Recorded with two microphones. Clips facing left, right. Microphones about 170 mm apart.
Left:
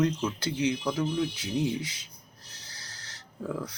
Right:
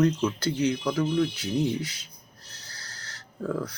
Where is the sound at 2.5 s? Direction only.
25° left (ahead or behind).